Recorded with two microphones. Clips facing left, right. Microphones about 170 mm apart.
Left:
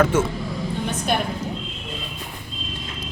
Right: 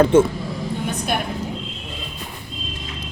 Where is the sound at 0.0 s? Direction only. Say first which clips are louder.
Right 5 dB; 30° right (ahead or behind).